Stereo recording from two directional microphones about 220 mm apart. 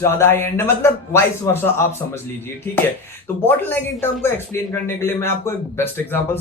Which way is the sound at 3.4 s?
10° left (ahead or behind).